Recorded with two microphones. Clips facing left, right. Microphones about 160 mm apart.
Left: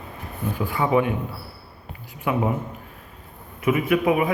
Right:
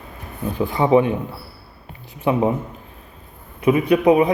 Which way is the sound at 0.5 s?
20° right (ahead or behind).